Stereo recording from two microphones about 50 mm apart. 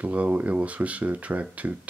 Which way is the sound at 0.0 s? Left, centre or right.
Right.